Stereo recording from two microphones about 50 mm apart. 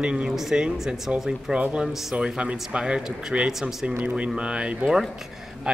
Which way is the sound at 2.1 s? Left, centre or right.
Right.